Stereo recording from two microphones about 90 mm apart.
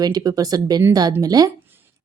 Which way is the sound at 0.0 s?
45° right (ahead or behind).